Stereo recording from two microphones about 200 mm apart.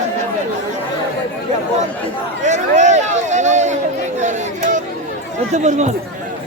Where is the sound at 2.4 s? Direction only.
35° right (ahead or behind).